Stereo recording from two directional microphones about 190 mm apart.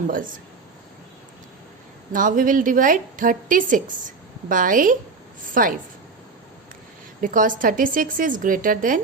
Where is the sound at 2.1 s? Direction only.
45° right (ahead or behind).